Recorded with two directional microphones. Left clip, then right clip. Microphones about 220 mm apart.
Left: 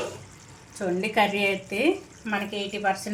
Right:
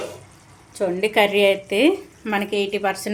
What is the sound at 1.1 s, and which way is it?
A woman's voice, 35° right (ahead or behind).